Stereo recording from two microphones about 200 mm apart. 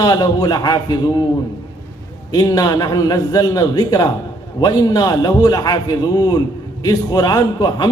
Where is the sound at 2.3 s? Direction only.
20° left (ahead or behind).